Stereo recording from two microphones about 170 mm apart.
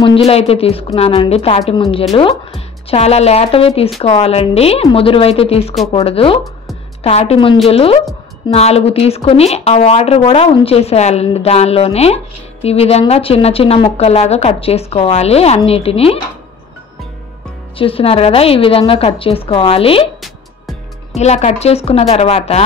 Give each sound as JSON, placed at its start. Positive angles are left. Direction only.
{"t": 0.0, "sound": "a woman's voice", "side_deg": 35}
{"t": 17.7, "sound": "a woman's voice", "side_deg": 35}
{"t": 21.1, "sound": "a woman's voice", "side_deg": 40}